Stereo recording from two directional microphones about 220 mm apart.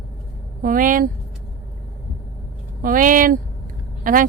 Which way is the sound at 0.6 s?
40° right (ahead or behind).